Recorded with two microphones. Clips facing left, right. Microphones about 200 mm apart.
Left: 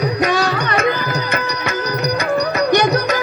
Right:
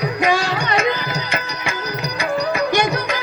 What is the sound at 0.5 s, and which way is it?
Tabla, 55° left (ahead or behind).